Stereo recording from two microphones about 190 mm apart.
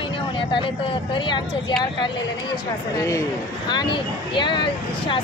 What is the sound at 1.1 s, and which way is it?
Speech, 25° left (ahead or behind).